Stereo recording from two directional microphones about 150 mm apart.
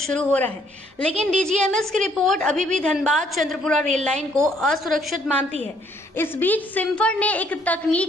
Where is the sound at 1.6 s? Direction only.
5° left (ahead or behind).